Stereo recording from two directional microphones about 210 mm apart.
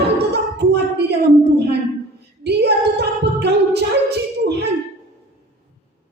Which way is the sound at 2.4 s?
50° right (ahead or behind).